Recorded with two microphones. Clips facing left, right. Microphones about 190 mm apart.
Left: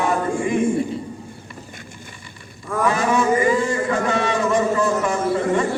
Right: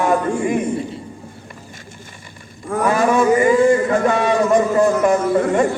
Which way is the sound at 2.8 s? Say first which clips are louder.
Right 4 dB; 50° right (ahead or behind).